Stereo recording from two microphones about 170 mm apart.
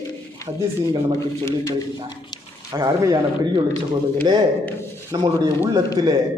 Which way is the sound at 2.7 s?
25° right (ahead or behind).